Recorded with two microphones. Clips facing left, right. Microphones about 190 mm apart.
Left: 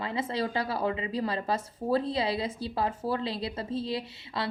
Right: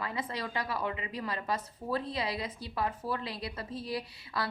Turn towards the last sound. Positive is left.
turn(degrees=25)  # may be behind; listen again after turning